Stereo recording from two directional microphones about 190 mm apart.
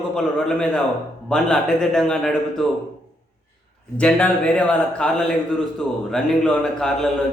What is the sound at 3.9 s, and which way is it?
A man's voice, 5° left (ahead or behind).